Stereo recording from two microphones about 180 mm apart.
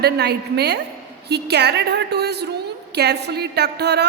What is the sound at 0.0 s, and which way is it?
A woman's voice, 65° right (ahead or behind).